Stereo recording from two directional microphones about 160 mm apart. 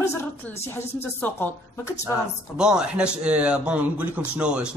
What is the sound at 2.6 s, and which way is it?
A man's voice, 5° right (ahead or behind).